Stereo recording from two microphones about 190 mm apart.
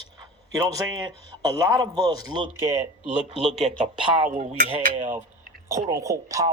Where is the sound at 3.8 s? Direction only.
40° right (ahead or behind).